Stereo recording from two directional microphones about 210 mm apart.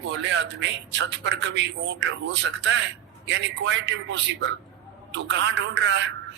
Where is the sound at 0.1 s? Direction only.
60° right (ahead or behind).